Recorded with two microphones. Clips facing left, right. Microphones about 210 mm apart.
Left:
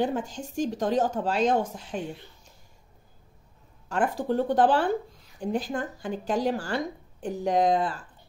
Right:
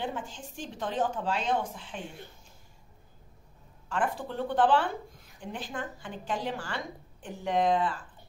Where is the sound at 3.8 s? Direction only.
40° left (ahead or behind).